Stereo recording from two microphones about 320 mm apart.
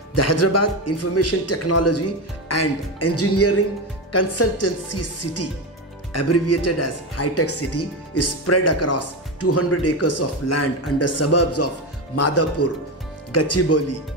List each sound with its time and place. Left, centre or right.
0.1 s speech: left